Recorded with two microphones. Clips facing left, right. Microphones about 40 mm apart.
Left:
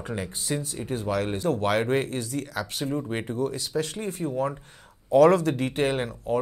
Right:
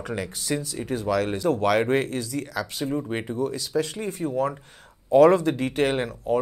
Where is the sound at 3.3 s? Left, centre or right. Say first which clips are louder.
Even; left.